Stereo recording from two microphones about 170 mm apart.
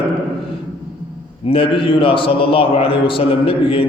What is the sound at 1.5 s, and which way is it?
A man's voice, 30° left (ahead or behind).